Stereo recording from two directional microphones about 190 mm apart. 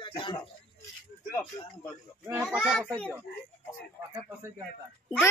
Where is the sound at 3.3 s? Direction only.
60° left (ahead or behind).